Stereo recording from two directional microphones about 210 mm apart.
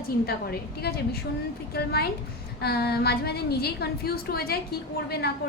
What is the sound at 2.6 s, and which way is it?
A woman's voice, 50° left (ahead or behind).